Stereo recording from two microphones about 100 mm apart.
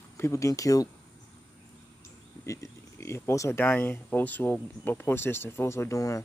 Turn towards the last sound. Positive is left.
turn(degrees=30)  # may be behind; listen again after turning